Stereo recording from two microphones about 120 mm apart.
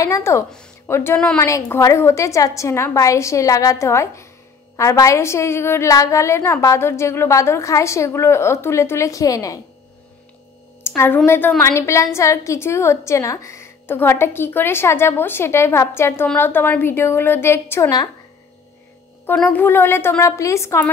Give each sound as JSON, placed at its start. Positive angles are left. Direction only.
{"t": 0.0, "sound": "a woman's voice", "side_deg": 25}
{"t": 11.2, "sound": "a woman's voice", "side_deg": 20}
{"t": 19.3, "sound": "a woman's voice", "side_deg": 15}